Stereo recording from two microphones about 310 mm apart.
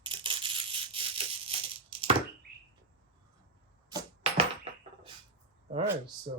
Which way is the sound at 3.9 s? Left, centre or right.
Centre.